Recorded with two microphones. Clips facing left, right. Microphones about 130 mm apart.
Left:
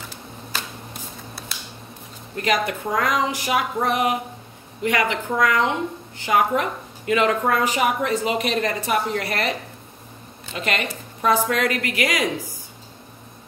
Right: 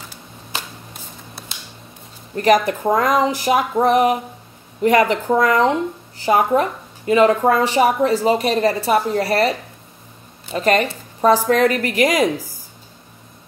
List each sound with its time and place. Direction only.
2.3 s a woman's voice: 40° right (ahead or behind)